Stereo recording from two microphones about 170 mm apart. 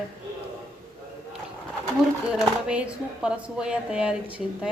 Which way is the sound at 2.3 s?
5° right (ahead or behind).